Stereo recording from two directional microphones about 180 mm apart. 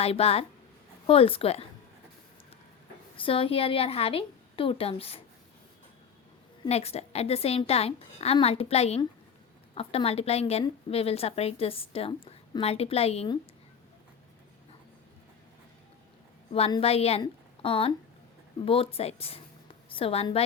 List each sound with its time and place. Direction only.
0.0 s a woman's voice: 35° left (ahead or behind)
3.2 s a woman's voice: 30° left (ahead or behind)
6.7 s a woman's voice: 35° left (ahead or behind)
16.5 s a woman's voice: 35° left (ahead or behind)